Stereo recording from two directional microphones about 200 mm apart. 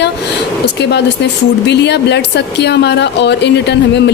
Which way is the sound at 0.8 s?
55° left (ahead or behind).